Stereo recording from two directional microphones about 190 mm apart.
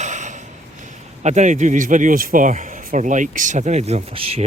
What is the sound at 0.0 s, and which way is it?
Speech, 40° right (ahead or behind).